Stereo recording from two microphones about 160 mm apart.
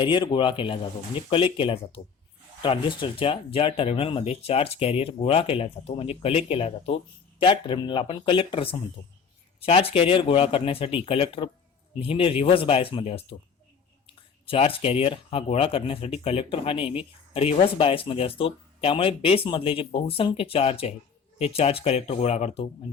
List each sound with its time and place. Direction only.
0.0 s speech: 30° left (ahead or behind)
14.4 s speech: 35° left (ahead or behind)